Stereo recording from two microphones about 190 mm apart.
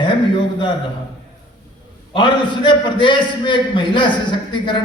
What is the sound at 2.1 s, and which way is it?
A man's voice, 25° left (ahead or behind).